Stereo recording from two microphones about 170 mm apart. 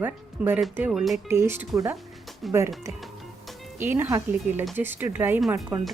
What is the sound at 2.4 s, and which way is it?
Speech, centre (ahead or behind).